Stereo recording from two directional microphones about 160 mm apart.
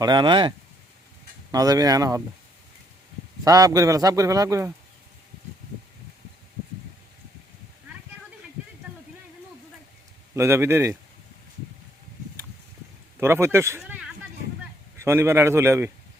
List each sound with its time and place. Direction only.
0.0 s a man's voice: 25° right (ahead or behind)
1.5 s a man's voice: 20° right (ahead or behind)
3.4 s a man's voice: 20° right (ahead or behind)
10.3 s speech: 15° right (ahead or behind)
13.1 s speech: 15° right (ahead or behind)
14.9 s speech: 15° right (ahead or behind)